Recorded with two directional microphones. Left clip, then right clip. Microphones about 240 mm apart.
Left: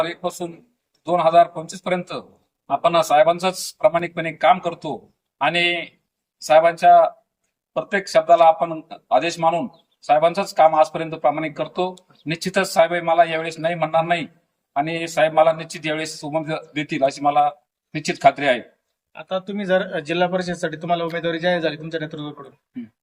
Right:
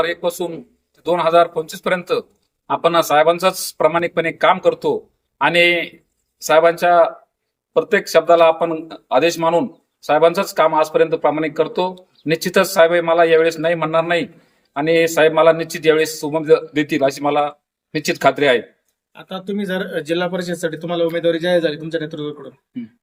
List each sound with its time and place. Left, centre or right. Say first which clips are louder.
0.0 s speech: right 5 dB; centre
19.1 s speech: even; centre